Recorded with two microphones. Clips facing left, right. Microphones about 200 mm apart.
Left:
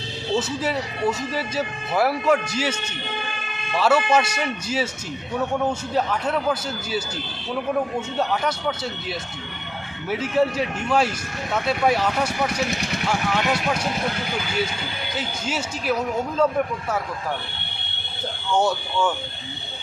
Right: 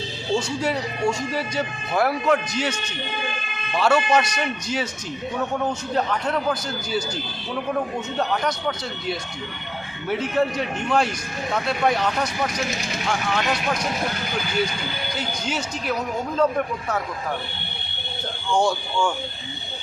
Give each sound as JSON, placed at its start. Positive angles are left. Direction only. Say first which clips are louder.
{"t": 0.3, "sound": "speech", "louder": "even", "side_deg": 5}
{"t": 3.8, "sound": "a man's voice", "louder": "even", "side_deg": 5}
{"t": 8.2, "sound": "a man's voice", "louder": "even", "side_deg": 5}
{"t": 12.7, "sound": "speech", "louder": "left 2 dB", "side_deg": 65}
{"t": 13.1, "sound": "a man's voice", "louder": "left 1 dB", "side_deg": 5}
{"t": 15.1, "sound": "speech", "louder": "left 1 dB", "side_deg": 5}
{"t": 18.5, "sound": "speech", "louder": "even", "side_deg": 5}